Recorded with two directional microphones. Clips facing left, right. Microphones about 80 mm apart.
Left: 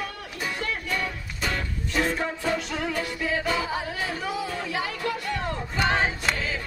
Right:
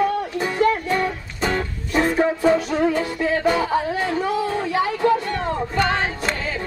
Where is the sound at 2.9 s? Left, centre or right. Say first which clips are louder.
Right 6 dB; right.